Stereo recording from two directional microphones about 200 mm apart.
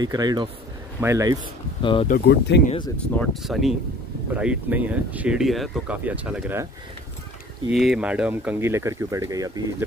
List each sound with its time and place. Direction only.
0.0 s speech: 20° right (ahead or behind)
1.8 s speech: 25° left (ahead or behind)
2.0 s speech: 50° left (ahead or behind)
3.0 s speech: centre (ahead or behind)
7.7 s speech: centre (ahead or behind)